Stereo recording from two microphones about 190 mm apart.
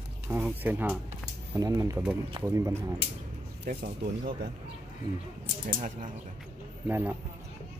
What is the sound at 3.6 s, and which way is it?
Speech, 50° right (ahead or behind).